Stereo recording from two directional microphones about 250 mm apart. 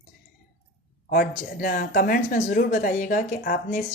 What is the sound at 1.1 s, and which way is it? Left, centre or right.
Speech, left.